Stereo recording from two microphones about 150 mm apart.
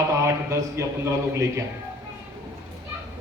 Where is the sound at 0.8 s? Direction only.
20° right (ahead or behind).